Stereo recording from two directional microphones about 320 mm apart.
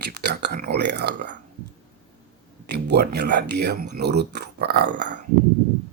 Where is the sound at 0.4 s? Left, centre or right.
Right.